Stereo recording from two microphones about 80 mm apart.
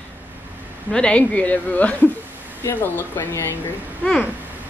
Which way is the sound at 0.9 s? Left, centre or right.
Centre.